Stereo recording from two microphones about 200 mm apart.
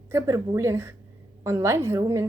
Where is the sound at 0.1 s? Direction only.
15° right (ahead or behind).